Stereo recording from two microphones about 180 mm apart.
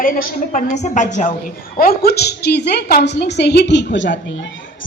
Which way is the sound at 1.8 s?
55° left (ahead or behind).